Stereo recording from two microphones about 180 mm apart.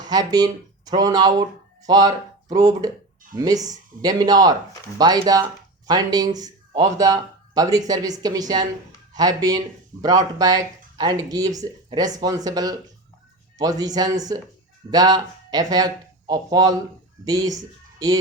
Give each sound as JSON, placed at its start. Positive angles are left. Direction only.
{"t": 0.0, "sound": "speech", "side_deg": -20}